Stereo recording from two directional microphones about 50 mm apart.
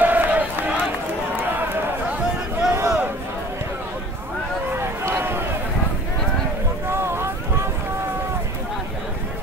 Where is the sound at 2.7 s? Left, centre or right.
Right.